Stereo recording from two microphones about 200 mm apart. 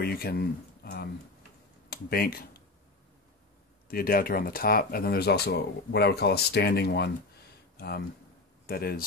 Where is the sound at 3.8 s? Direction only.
45° left (ahead or behind).